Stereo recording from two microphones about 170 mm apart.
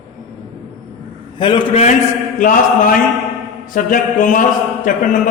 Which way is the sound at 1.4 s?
30° left (ahead or behind).